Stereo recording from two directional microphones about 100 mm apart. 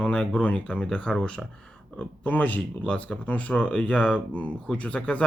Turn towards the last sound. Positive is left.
turn(degrees=10)  # may be behind; listen again after turning